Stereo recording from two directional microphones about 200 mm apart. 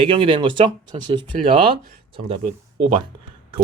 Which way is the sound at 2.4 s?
45° right (ahead or behind).